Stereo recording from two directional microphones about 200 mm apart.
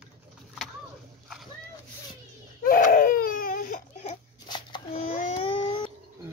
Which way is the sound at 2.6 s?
45° left (ahead or behind).